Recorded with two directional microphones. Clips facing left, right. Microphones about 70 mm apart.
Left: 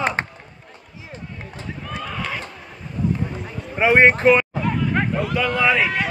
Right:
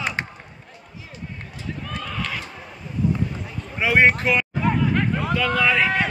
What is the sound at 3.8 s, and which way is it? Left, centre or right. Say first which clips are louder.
Speech: left 3 dB; left.